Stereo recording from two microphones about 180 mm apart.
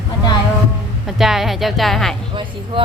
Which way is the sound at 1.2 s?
Centre (ahead or behind).